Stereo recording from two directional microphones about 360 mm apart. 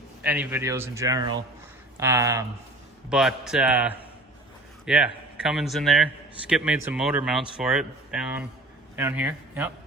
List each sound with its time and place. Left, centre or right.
0.2 s a man's voice: centre